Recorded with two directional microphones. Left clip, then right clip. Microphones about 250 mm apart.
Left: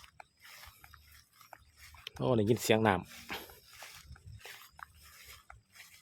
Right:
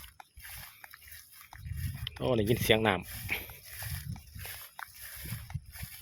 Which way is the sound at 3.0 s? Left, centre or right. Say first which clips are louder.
Right 5 dB; right.